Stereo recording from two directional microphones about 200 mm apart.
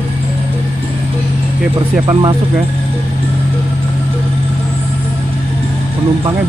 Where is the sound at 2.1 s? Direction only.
25° right (ahead or behind).